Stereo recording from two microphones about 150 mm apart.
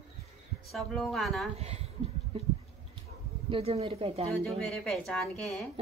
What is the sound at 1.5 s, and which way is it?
Speech, 45° right (ahead or behind).